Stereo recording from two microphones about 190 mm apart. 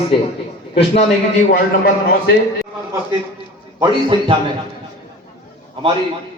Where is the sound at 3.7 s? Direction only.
20° right (ahead or behind).